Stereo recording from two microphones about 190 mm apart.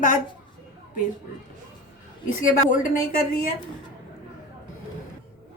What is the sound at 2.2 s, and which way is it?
A woman's voice, 45° left (ahead or behind).